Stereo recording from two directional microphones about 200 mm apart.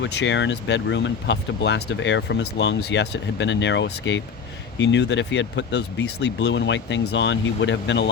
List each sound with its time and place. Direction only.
0.0 s speech: 60° left (ahead or behind)